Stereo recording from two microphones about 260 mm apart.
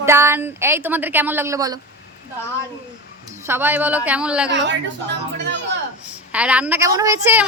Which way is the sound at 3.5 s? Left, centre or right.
Centre.